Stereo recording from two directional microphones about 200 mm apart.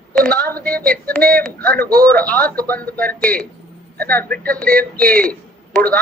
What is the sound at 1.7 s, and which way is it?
Speech, 50° right (ahead or behind).